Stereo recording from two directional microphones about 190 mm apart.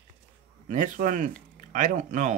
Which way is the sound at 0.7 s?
45° right (ahead or behind).